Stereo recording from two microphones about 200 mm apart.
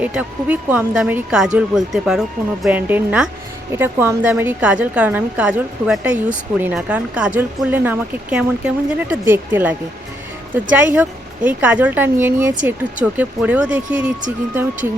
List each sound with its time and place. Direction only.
0.0 s a woman's voice: 5° right (ahead or behind)